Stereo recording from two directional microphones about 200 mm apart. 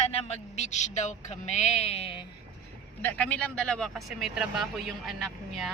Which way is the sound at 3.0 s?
5° left (ahead or behind).